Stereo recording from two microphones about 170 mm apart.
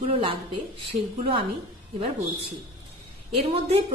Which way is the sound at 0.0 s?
30° right (ahead or behind).